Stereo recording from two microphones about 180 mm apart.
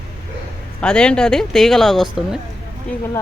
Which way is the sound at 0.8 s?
5° left (ahead or behind).